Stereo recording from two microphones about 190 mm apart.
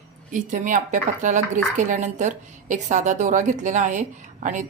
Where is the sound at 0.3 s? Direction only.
45° right (ahead or behind).